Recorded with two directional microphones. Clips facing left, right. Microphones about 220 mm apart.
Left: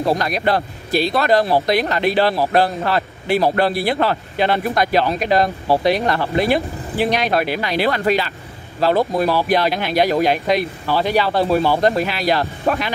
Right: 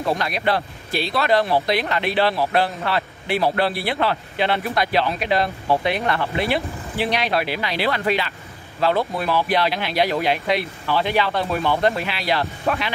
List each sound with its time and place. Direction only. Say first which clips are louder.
0.0 s speech: left 4 dB; 40° left (ahead or behind)